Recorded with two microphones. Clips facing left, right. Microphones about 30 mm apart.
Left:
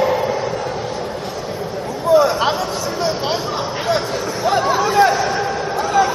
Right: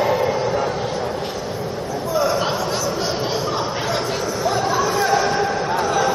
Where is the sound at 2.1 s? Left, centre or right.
Left.